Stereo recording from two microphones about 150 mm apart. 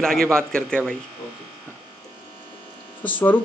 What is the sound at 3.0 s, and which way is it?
Speech, 10° left (ahead or behind).